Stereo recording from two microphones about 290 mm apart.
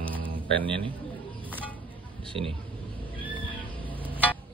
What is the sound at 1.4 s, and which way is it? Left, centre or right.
Vehicle, centre.